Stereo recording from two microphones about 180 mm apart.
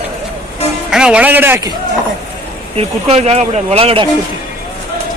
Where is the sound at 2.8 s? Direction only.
35° right (ahead or behind).